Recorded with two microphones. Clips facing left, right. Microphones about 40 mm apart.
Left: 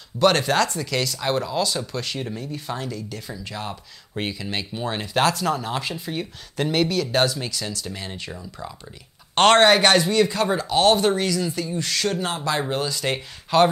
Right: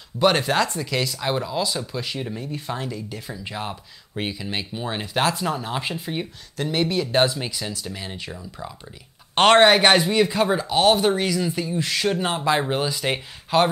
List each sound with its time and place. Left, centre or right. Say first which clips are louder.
0.2 s speech: left 1 dB; centre
2.8 s speech: even; right
4.2 s speech: even; centre
5.8 s speech: right 1 dB; right
7.8 s speech: even; centre